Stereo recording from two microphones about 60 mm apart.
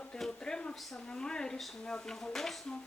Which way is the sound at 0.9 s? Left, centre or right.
Centre.